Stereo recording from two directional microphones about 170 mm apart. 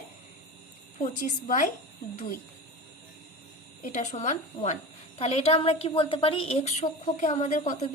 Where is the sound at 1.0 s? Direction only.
45° left (ahead or behind).